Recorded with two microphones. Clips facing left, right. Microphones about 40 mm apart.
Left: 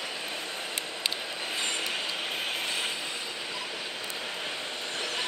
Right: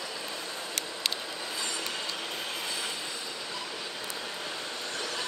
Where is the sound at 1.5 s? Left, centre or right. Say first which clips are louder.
Left 4 dB; left.